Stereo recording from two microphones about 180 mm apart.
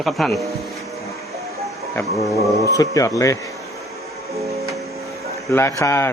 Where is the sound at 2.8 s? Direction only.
20° left (ahead or behind).